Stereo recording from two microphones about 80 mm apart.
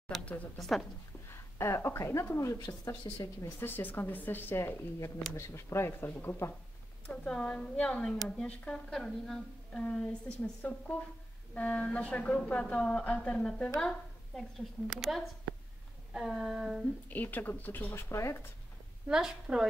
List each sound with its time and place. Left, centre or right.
0.2 s a woman's voice: centre
0.6 s a sound: centre
1.6 s speech: left
3.1 s speech: left
3.4 s a woman's voice: left
7.1 s a woman's voice: centre
13.7 s speech: centre
15.0 s a sound: centre
17.1 s a woman's voice: left
19.0 s a woman's voice: centre